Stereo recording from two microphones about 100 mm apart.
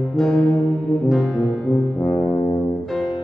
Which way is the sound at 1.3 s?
5° left (ahead or behind).